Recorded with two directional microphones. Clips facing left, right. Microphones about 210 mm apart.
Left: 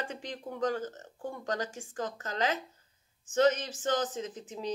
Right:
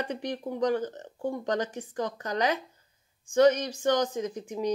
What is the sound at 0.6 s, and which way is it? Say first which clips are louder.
Speech: right 4 dB; 20° right (ahead or behind).